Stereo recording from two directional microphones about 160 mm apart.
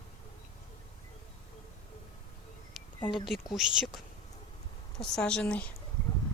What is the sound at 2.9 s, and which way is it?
Speech, 30° left (ahead or behind).